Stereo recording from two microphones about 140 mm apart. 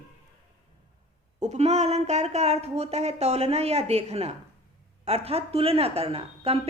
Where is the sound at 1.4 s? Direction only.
55° right (ahead or behind).